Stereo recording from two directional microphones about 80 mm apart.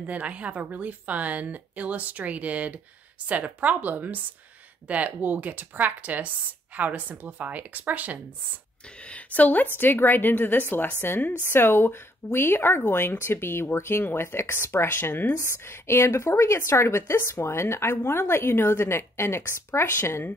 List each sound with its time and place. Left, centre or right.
0.0 s speech: centre
9.0 s speech: centre